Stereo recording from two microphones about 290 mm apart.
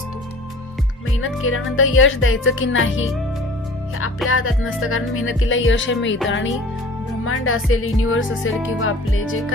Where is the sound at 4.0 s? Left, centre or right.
Left.